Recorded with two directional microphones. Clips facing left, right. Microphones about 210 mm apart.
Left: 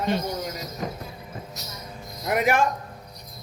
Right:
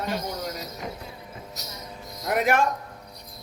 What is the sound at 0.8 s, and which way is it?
Speech, 40° left (ahead or behind).